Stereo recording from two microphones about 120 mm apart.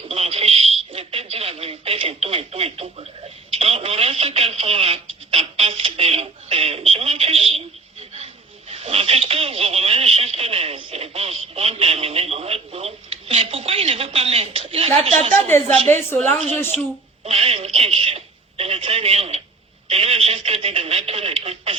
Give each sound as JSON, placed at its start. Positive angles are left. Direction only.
{"t": 0.1, "sound": "a sound", "side_deg": -55}
{"t": 3.5, "sound": "telephone", "side_deg": -55}
{"t": 8.7, "sound": "telephone", "side_deg": -55}
{"t": 15.9, "sound": "a woman's voice", "side_deg": 20}
{"t": 16.7, "sound": "speech", "side_deg": -60}
{"t": 17.2, "sound": "telephone", "side_deg": -55}